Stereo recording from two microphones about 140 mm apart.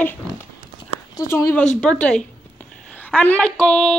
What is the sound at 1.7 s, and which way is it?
A woman's voice, 5° left (ahead or behind).